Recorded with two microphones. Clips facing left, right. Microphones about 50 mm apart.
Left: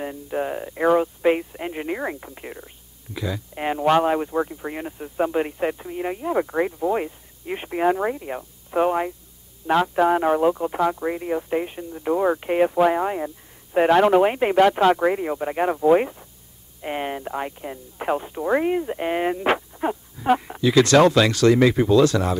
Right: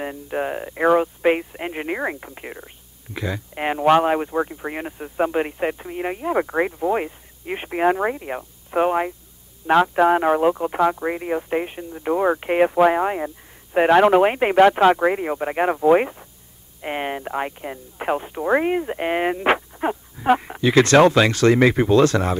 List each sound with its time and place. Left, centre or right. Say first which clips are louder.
0.0 s speech: right 1 dB; right
3.1 s speech: right 1 dB; right